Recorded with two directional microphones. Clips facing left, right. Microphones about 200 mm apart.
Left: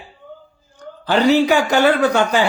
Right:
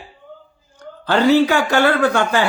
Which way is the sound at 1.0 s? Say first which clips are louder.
Right 1 dB; 15° left (ahead or behind).